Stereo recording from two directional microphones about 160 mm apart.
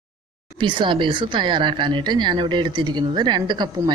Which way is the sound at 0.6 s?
30° right (ahead or behind).